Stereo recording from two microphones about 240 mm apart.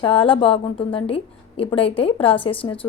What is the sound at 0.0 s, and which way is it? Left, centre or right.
A woman's voice, left.